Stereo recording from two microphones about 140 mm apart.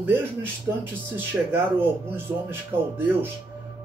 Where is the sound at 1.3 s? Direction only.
15° right (ahead or behind).